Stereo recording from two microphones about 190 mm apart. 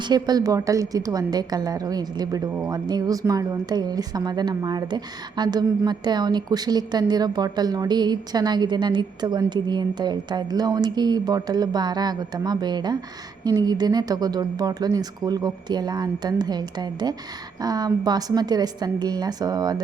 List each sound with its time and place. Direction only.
0.0 s a woman's voice: 20° right (ahead or behind)